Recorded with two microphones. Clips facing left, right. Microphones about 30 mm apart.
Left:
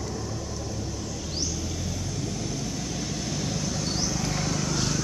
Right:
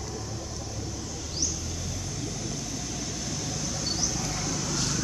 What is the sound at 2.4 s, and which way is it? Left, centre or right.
Vehicle, centre.